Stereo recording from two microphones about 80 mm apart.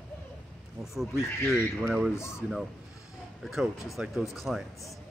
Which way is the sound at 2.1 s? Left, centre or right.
Left.